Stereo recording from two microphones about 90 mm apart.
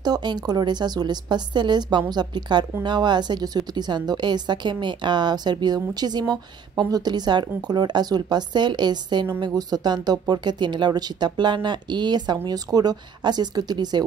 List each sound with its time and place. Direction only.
0.0 s a woman's voice: 50° right (ahead or behind)